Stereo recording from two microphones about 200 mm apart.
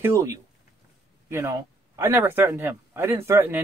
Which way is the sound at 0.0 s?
15° right (ahead or behind).